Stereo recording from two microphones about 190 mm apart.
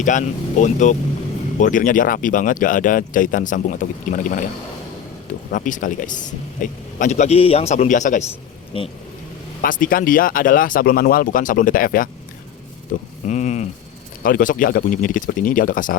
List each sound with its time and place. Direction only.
0.0 s speech: 40° left (ahead or behind)
5.5 s speech: 45° left (ahead or behind)
8.7 s speech: 30° left (ahead or behind)
9.6 s speech: 45° left (ahead or behind)